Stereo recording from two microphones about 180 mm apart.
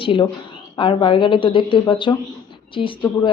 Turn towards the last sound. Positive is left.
turn(degrees=25)  # may be behind; listen again after turning